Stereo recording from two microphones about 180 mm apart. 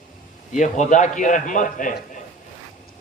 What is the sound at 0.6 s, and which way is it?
A man's voice, 45° left (ahead or behind).